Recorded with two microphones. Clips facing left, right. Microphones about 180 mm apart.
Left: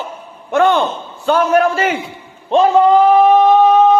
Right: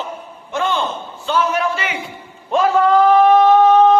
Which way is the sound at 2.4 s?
25° left (ahead or behind).